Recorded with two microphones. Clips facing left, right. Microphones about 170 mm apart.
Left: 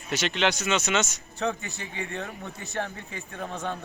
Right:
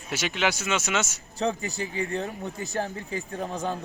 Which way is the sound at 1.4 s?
35° right (ahead or behind).